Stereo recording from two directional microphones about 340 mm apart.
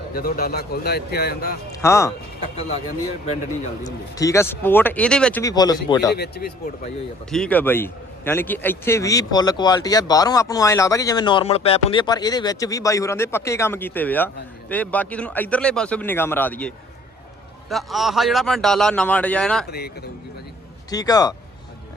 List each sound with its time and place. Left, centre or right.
0.1 s a man's voice: left
1.7 s a man's voice: centre
3.8 s a man's voice: centre
6.1 s a man's voice: left
7.3 s a man's voice: centre
20.9 s a man's voice: centre